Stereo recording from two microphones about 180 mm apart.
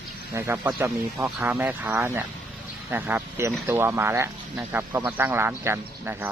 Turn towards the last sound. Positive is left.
turn(degrees=-15)  # may be behind; listen again after turning